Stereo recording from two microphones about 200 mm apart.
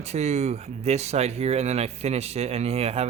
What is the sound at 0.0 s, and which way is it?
A man's voice, 35° right (ahead or behind).